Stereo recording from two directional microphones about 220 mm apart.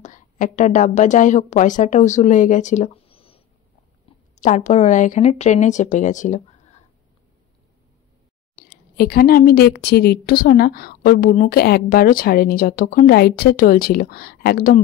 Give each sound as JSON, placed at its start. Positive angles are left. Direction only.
{"t": 0.0, "sound": "a woman's voice", "side_deg": 35}
{"t": 8.5, "sound": "a woman's voice", "side_deg": 45}